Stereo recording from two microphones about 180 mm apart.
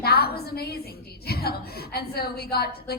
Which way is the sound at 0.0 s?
60° left (ahead or behind).